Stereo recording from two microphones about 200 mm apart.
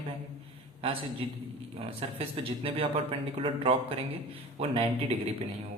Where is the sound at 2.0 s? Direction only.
25° right (ahead or behind).